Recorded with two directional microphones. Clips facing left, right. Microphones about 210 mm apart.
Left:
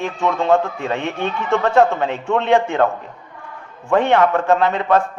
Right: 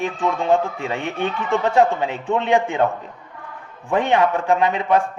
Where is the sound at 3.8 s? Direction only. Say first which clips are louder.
Left 3 dB; 15° right (ahead or behind).